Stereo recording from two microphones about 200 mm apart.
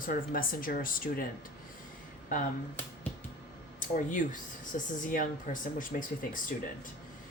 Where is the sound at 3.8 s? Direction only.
40° left (ahead or behind).